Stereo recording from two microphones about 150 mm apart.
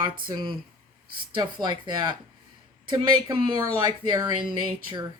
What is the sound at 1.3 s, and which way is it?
Speech, 30° right (ahead or behind).